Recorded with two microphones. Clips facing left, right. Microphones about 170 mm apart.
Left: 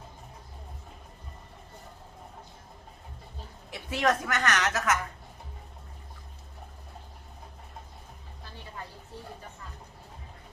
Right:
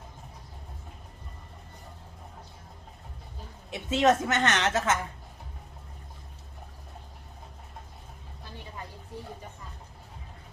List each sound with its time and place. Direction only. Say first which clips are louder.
3.7 s a woman's voice: right 4 dB; 20° right (ahead or behind)